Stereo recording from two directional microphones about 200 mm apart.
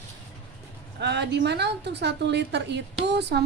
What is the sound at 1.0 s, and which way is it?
A woman's voice, 60° right (ahead or behind).